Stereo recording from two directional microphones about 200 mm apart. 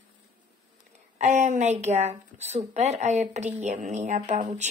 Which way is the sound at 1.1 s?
35° right (ahead or behind).